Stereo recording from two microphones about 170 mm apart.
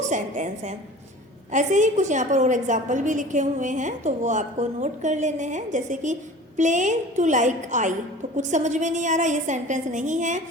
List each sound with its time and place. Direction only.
0.0 s a woman's voice: 45° right (ahead or behind)